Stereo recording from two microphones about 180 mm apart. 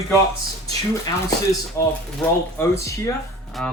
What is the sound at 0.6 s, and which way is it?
Speech, 20° left (ahead or behind).